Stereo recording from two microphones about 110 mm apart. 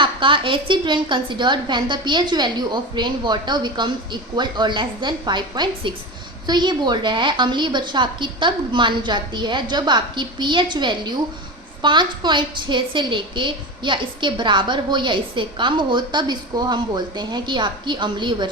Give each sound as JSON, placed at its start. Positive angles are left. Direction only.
{"t": 0.0, "sound": "a woman's voice", "side_deg": -50}